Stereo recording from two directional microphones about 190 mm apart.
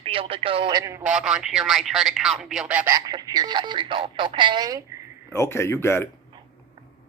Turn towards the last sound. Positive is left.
turn(degrees=15)  # may be behind; listen again after turning